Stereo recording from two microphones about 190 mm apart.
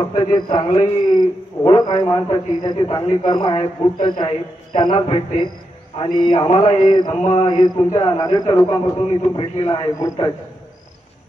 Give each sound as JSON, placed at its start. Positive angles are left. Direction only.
{"t": 0.0, "sound": "a man's voice", "side_deg": 25}